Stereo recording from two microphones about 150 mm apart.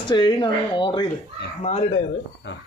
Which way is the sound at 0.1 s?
30° left (ahead or behind).